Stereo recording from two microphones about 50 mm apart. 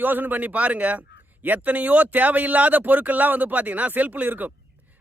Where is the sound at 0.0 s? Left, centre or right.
Right.